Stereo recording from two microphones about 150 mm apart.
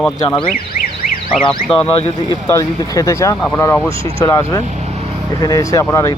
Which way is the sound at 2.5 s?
20° left (ahead or behind).